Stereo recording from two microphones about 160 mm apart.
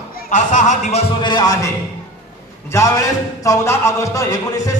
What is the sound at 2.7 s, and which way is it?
A man's voice, 20° left (ahead or behind).